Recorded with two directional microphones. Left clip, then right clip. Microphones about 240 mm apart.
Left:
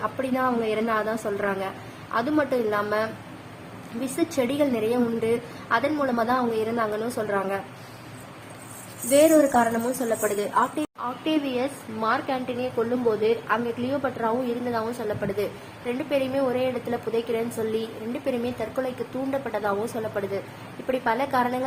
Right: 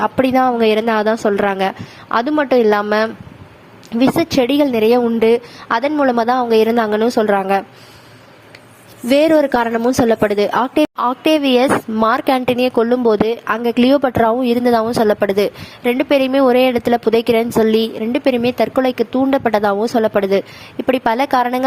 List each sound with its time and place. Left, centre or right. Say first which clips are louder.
0.2 s a woman's voice: right 12 dB; right
4.2 s a woman's voice: right 6 dB; right
9.0 s a woman's voice: right 6 dB; right